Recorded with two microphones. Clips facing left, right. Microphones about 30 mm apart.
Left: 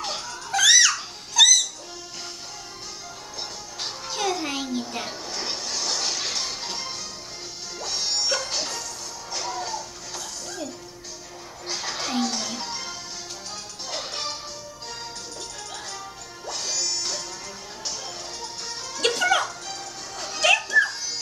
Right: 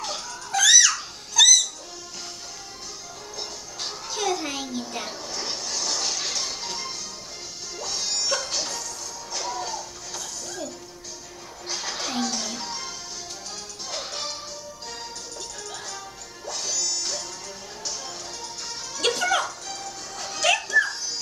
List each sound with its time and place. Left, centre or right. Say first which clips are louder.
0.0 s music: left 1 dB; left
1.3 s a sound: even; centre
3.3 s music: even; centre
11.7 s music: left 1 dB; centre
16.5 s music: even; centre
18.9 s music: left 2 dB; centre